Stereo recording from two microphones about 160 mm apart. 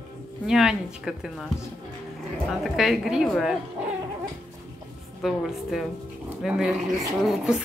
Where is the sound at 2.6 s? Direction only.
Centre (ahead or behind).